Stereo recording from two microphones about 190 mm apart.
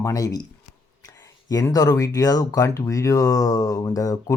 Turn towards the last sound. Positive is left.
turn(degrees=20)  # may be behind; listen again after turning